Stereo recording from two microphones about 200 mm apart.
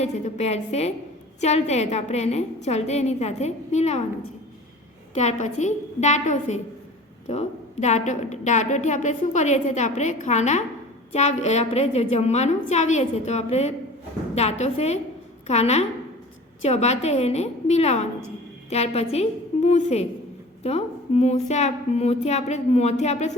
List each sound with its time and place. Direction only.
0.0 s a woman's voice: 35° left (ahead or behind)
5.1 s a woman's voice: 35° left (ahead or behind)